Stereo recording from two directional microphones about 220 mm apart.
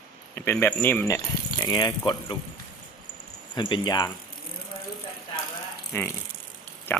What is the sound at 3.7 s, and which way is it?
Speech, 20° left (ahead or behind).